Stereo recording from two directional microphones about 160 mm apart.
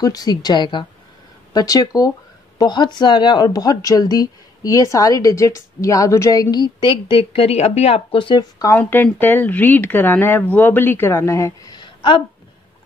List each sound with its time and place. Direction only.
0.0 s speech: 25° left (ahead or behind)
8.7 s speech: 10° left (ahead or behind); by 12.2 s 30° left (ahead or behind)